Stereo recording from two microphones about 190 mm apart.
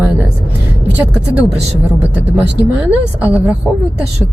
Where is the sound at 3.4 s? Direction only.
5° right (ahead or behind).